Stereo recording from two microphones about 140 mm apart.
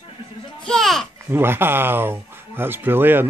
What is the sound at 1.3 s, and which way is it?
Speech, 15° right (ahead or behind).